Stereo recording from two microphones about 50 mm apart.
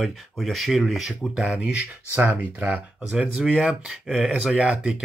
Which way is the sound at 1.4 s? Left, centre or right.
Right.